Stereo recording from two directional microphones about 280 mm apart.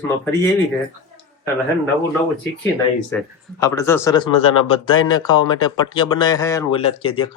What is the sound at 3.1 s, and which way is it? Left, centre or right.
A man's voice, centre.